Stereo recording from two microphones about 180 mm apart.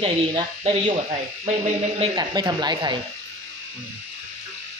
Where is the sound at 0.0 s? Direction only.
30° right (ahead or behind).